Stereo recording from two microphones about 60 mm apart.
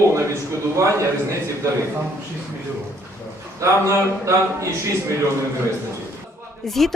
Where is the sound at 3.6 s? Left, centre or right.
Right.